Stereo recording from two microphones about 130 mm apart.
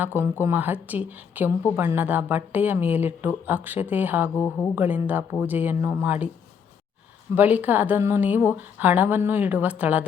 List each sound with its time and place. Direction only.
0.0 s a woman's voice: 15° right (ahead or behind)
4.4 s speech: 15° left (ahead or behind)
4.7 s a woman's voice: 15° right (ahead or behind)
7.3 s a woman's voice: 15° right (ahead or behind)